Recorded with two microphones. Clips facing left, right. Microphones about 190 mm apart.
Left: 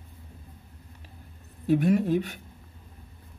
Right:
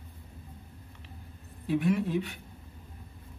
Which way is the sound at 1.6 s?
40° left (ahead or behind).